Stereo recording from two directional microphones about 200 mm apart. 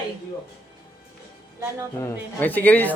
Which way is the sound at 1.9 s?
10° left (ahead or behind).